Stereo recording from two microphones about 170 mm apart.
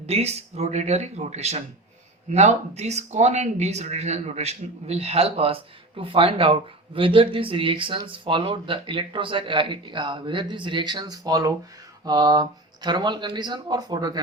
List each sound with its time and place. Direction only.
0.0 s speech: 40° right (ahead or behind)